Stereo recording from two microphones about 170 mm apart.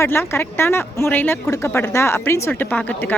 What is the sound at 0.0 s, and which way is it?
Speech, 15° left (ahead or behind).